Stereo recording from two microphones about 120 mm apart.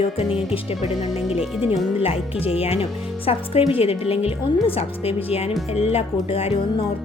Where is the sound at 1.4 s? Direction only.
5° right (ahead or behind).